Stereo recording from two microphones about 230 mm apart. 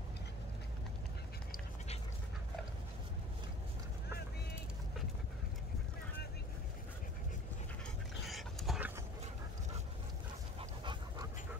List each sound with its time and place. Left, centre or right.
8.3 s dog: centre
10.6 s dog: right